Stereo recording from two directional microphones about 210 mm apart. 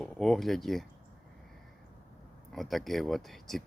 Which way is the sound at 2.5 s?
Centre (ahead or behind).